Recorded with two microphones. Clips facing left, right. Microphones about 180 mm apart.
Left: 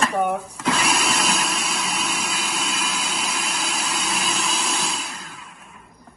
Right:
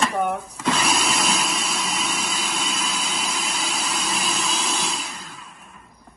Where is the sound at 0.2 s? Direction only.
5° left (ahead or behind).